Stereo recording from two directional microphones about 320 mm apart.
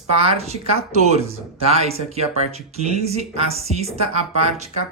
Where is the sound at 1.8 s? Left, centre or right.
Centre.